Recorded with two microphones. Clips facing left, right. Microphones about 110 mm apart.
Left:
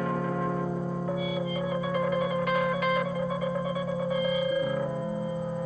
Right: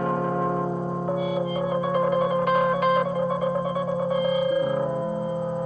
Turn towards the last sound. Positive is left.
turn(degrees=-40)  # may be behind; listen again after turning